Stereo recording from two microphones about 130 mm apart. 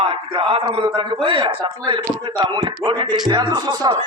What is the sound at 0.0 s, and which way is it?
A man's voice, 45° right (ahead or behind).